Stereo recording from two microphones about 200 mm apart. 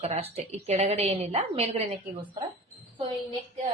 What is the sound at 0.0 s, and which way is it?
A woman's voice, 30° right (ahead or behind).